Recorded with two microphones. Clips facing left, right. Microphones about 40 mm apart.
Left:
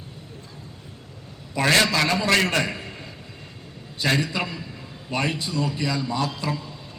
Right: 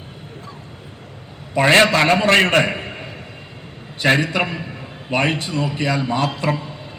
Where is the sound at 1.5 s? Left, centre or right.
Right.